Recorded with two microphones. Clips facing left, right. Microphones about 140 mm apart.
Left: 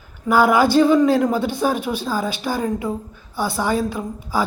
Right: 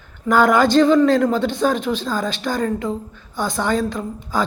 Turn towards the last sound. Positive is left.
turn(degrees=10)  # may be behind; listen again after turning